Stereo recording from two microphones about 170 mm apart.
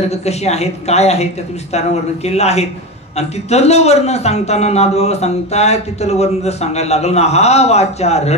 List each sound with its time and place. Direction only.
0.1 s a man's voice: 40° left (ahead or behind)